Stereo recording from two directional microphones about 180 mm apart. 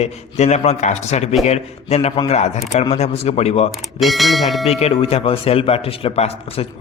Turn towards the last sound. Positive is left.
turn(degrees=35)  # may be behind; listen again after turning